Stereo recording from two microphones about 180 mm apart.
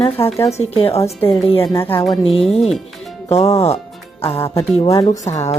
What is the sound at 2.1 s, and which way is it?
Speech, 30° left (ahead or behind).